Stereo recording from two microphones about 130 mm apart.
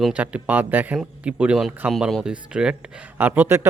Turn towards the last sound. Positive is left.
turn(degrees=-15)  # may be behind; listen again after turning